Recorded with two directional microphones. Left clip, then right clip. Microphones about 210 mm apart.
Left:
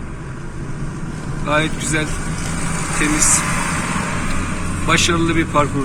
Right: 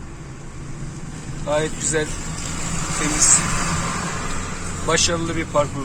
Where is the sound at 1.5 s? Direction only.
25° right (ahead or behind).